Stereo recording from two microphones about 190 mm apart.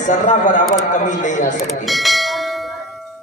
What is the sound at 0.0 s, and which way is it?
A man's voice, 40° left (ahead or behind).